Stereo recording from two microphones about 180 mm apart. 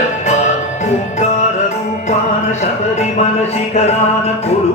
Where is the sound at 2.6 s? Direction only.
35° left (ahead or behind).